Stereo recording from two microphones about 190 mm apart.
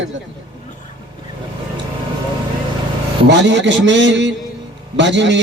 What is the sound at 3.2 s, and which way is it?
A man's voice, 65° right (ahead or behind).